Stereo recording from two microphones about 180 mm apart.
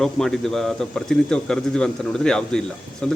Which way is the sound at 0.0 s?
Centre (ahead or behind).